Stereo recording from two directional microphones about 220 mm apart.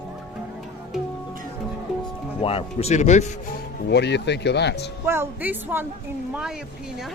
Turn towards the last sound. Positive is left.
turn(degrees=-10)  # may be behind; listen again after turning